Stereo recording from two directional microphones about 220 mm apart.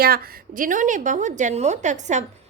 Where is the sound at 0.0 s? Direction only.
40° right (ahead or behind).